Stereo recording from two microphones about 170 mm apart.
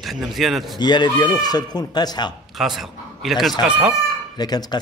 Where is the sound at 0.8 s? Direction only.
25° left (ahead or behind).